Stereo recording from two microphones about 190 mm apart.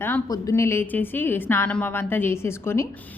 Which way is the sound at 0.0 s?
15° left (ahead or behind).